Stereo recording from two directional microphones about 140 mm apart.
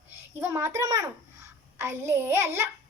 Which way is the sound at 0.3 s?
15° right (ahead or behind).